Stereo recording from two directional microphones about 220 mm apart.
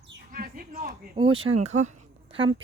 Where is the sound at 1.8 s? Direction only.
30° right (ahead or behind).